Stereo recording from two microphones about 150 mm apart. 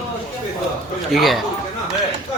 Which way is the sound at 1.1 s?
Centre (ahead or behind).